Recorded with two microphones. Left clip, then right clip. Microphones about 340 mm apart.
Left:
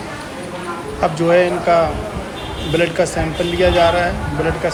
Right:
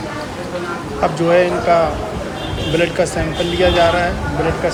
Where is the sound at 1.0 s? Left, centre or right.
Centre.